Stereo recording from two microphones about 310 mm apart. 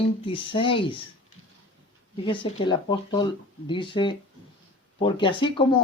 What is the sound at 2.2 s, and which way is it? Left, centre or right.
Speech, centre.